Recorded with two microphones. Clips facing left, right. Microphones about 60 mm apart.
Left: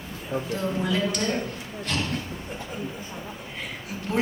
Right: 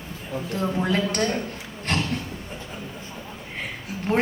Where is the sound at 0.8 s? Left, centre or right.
Right.